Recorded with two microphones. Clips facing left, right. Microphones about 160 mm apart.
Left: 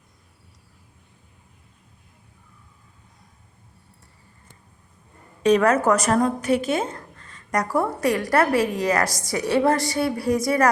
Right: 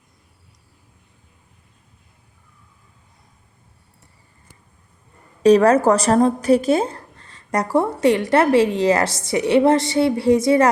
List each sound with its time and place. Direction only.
5.4 s a woman's voice: 35° right (ahead or behind)